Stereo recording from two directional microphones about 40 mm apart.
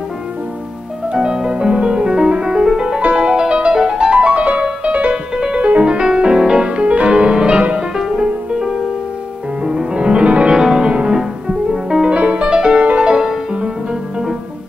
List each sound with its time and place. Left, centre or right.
1.1 s music: centre
3.0 s music: right
5.1 s music: centre
5.6 s music: right
5.9 s music: right
7.9 s music: centre; by 10.5 s right
10.5 s music: centre
10.9 s music: right
11.1 s music: centre
12.1 s music: right
13.2 s music: centre